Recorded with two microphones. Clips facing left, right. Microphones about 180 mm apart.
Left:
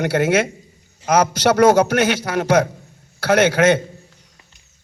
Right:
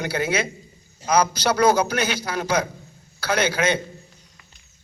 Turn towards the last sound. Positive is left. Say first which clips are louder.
# left 7 dB
turn(degrees=75)  # may be behind; listen again after turning